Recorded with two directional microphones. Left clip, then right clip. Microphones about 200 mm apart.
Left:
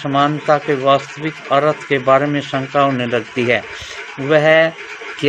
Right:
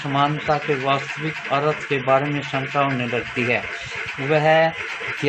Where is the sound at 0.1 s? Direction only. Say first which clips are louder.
Left 6 dB; 40° left (ahead or behind).